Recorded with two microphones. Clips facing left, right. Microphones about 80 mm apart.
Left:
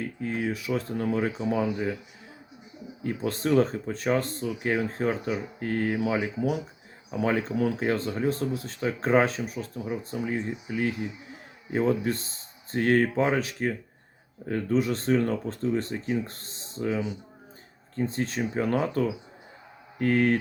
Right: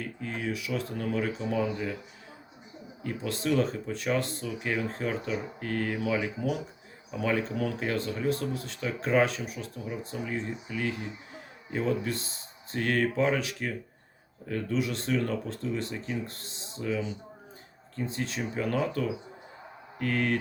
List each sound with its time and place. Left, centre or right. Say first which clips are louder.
0.0 s speech: left 5 dB; left
3.0 s speech: left 4 dB; left